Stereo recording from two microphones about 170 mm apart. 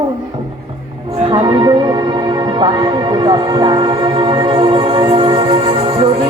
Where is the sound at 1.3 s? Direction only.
25° right (ahead or behind).